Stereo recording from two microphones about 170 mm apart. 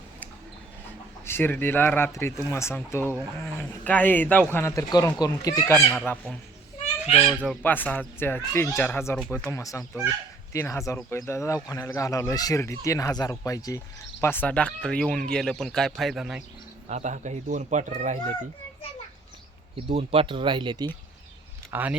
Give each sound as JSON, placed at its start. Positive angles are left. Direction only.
{"t": 1.2, "sound": "speech", "side_deg": 15}
{"t": 5.9, "sound": "speech", "side_deg": 5}
{"t": 7.4, "sound": "speech", "side_deg": 5}
{"t": 16.9, "sound": "a man's voice", "side_deg": -45}
{"t": 19.9, "sound": "speech", "side_deg": -35}
{"t": 21.7, "sound": "speech", "side_deg": -10}